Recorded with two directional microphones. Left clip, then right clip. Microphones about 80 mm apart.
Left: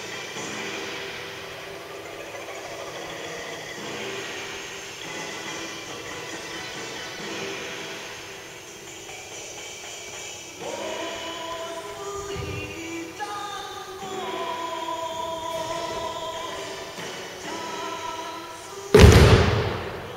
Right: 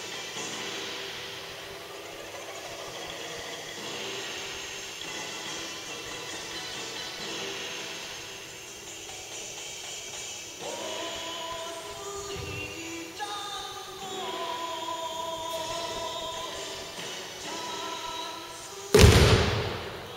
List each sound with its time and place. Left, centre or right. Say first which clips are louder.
0.4 s vehicle: left 3 dB; right
7.2 s vehicle: left 4 dB; right
10.7 s a sound: left 4 dB; right
14.1 s music: left 4 dB; right
15.7 s train: left 4 dB; centre
17.5 s music: left 3 dB; right
18.9 s a sound: left 5 dB; centre